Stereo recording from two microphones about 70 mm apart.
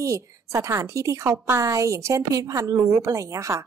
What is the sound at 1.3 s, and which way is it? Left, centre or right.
Speech, right.